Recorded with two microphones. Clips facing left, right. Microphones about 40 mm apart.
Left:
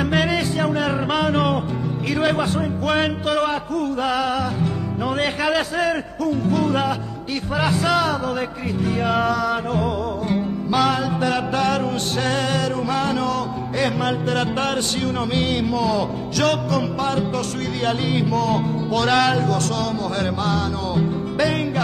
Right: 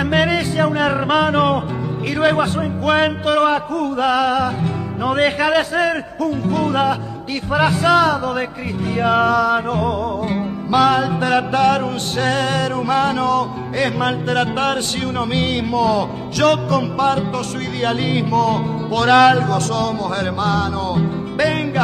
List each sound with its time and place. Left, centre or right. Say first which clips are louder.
0.0 s music: right 3 dB; right